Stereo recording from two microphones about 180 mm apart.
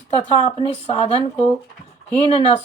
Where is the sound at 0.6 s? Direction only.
30° left (ahead or behind).